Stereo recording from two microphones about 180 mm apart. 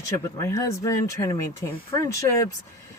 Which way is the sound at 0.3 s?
15° left (ahead or behind).